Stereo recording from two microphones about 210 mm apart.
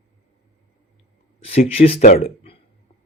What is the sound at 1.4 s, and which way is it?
Speech, 30° left (ahead or behind).